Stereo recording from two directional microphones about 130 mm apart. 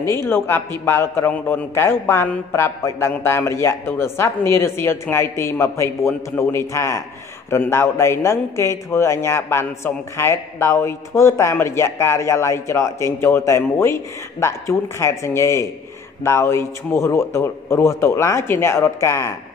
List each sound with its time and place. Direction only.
0.3 s a man's voice: 15° left (ahead or behind)